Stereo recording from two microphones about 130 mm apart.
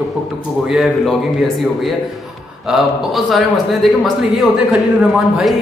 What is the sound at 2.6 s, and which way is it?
A man's voice, centre (ahead or behind).